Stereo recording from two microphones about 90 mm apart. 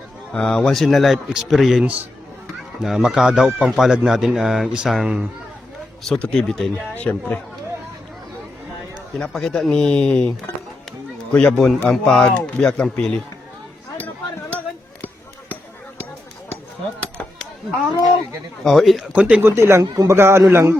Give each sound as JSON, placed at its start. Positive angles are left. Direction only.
{"t": 0.3, "sound": "speech", "side_deg": 10}
{"t": 2.8, "sound": "speech", "side_deg": -5}
{"t": 6.0, "sound": "speech", "side_deg": 10}
{"t": 6.9, "sound": "speech", "side_deg": 15}
{"t": 9.1, "sound": "speech", "side_deg": 10}
{"t": 18.6, "sound": "speech", "side_deg": 0}
{"t": 19.1, "sound": "speech", "side_deg": -10}
{"t": 19.4, "sound": "speech", "side_deg": -25}
{"t": 19.8, "sound": "a man's voice", "side_deg": -45}
{"t": 20.1, "sound": "speech", "side_deg": -25}